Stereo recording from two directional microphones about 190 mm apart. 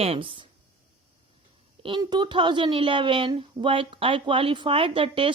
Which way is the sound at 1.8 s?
25° right (ahead or behind).